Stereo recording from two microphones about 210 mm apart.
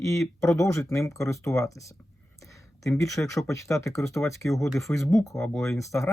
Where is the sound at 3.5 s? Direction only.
15° left (ahead or behind).